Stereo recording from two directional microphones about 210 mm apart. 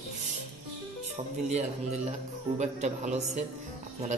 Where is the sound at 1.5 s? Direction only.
30° right (ahead or behind).